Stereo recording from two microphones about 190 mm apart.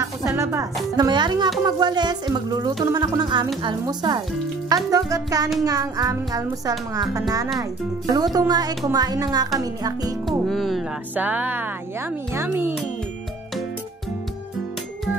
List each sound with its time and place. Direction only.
0.4 s a woman's voice: 15° right (ahead or behind)
10.2 s speech: centre (ahead or behind)